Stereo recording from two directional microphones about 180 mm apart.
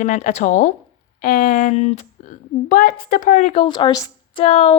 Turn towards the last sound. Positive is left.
turn(degrees=35)  # may be behind; listen again after turning